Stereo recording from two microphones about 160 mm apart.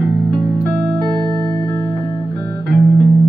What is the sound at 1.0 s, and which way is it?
Music, 20° right (ahead or behind).